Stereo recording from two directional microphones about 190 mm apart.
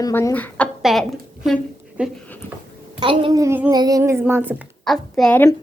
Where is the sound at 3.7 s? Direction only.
20° right (ahead or behind).